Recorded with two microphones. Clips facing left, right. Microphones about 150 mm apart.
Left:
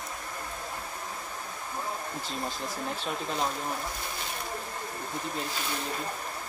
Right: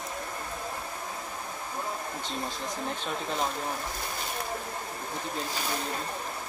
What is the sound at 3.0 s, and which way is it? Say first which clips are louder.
Speech: even; centre (ahead or behind).